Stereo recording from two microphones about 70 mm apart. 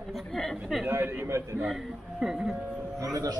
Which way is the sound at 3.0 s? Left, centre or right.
Right.